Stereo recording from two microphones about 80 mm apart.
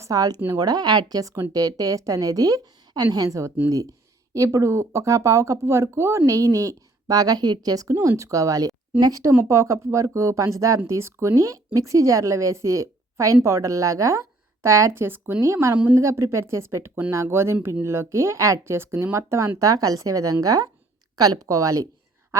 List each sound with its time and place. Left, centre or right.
0.0 s speech: right
15.7 s a woman's voice: centre
16.0 s speech: right
19.5 s speech: right